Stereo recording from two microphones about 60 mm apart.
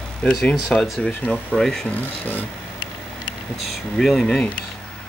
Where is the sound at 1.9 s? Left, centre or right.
Left.